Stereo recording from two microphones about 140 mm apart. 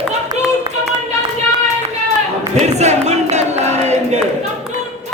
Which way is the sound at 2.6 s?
55° right (ahead or behind).